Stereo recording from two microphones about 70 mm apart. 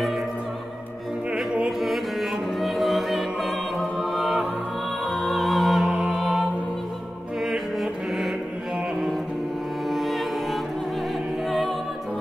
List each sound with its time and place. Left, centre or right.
1.3 s music: centre
1.8 s music: centre
9.8 s music: centre